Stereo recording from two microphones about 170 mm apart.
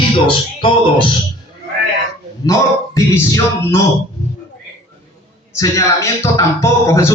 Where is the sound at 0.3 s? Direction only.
30° left (ahead or behind).